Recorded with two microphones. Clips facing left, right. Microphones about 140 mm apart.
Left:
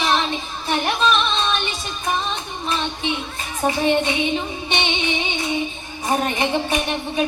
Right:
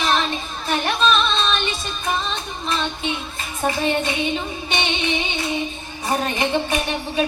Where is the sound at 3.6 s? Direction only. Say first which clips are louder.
Left 1 dB; 15° left (ahead or behind).